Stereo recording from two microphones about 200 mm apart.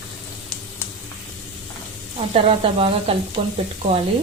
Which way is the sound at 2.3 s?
30° right (ahead or behind).